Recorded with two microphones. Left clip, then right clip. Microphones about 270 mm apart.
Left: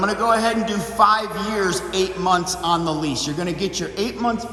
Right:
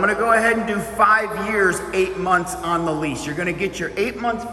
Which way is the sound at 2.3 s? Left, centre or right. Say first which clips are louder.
Right 1 dB; centre.